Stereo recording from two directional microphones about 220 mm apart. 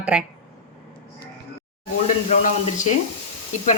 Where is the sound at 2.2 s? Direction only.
30° left (ahead or behind).